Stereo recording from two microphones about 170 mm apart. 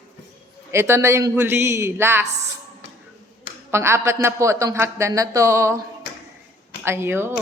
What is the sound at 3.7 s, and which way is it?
Speech, 15° right (ahead or behind).